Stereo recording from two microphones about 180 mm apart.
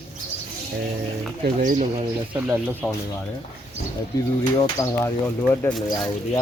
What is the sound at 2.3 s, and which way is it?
Speech, 10° right (ahead or behind).